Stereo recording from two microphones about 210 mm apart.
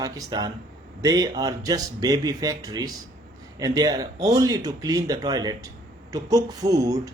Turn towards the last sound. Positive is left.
turn(degrees=-15)  # may be behind; listen again after turning